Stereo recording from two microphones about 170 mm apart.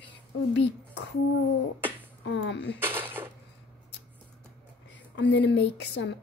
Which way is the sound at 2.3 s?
90° left.